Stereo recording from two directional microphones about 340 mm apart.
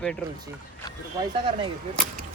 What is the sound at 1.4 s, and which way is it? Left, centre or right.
Speech, centre.